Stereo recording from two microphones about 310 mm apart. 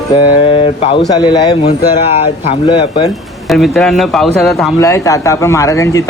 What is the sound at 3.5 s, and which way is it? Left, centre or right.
A man's voice, centre.